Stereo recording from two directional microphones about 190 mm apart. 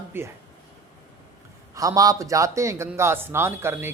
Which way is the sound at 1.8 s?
20° right (ahead or behind).